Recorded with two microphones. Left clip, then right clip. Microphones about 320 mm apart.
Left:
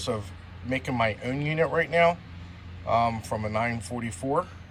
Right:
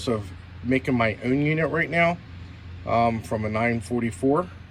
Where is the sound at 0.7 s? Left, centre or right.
Centre.